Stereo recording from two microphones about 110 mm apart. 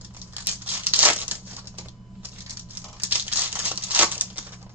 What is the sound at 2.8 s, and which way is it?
Crumpling, 15° right (ahead or behind).